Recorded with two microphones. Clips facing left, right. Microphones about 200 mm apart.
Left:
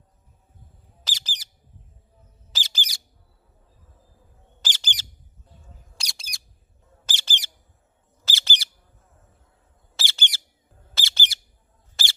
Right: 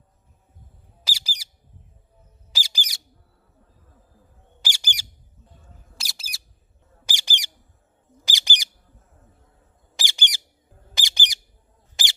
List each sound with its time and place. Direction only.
1.0 s bird: 10° right (ahead or behind)
2.5 s squawk: 10° right (ahead or behind)
4.6 s squawk: 10° right (ahead or behind)
6.0 s bird: 5° right (ahead or behind)
9.9 s bird: 15° right (ahead or behind)
12.0 s a sound: 15° right (ahead or behind)